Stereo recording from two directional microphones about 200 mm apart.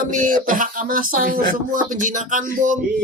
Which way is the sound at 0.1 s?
40° right (ahead or behind).